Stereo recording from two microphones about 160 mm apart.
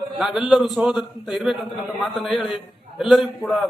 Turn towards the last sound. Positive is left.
turn(degrees=0)  # may be behind; listen again after turning